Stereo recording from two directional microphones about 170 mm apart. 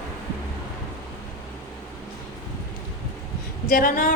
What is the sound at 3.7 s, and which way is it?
Speech, 55° left (ahead or behind).